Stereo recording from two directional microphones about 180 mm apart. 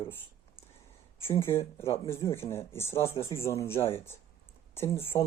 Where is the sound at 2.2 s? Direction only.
15° left (ahead or behind).